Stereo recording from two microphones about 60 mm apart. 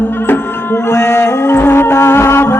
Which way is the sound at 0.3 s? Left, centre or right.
Left.